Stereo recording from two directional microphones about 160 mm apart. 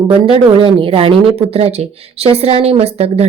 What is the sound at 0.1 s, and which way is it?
Speech, 35° right (ahead or behind).